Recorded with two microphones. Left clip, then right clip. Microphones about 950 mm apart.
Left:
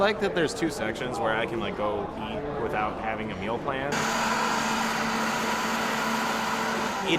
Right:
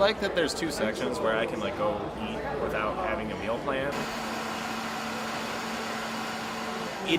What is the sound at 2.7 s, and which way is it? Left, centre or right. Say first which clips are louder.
Speech: left 1 dB; left.